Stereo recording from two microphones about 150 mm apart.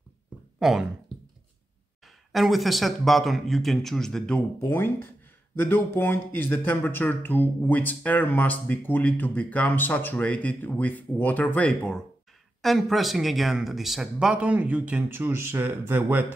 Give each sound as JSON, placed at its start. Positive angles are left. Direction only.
{"t": 0.6, "sound": "speech", "side_deg": 0}
{"t": 2.3, "sound": "a man's voice", "side_deg": 0}
{"t": 4.6, "sound": "speech", "side_deg": 15}